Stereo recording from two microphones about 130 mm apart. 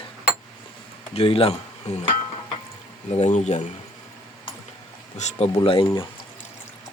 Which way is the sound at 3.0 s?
60° left (ahead or behind).